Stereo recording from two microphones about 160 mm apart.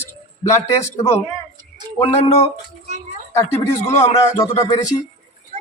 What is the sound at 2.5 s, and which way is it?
Speech, 50° right (ahead or behind).